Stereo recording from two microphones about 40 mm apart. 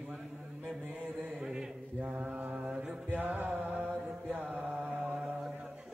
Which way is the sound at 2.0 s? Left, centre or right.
Right.